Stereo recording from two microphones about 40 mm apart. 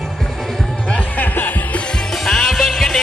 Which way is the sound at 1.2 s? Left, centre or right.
Left.